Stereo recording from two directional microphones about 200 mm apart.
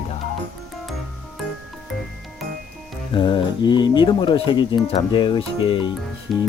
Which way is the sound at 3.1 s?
25° left (ahead or behind).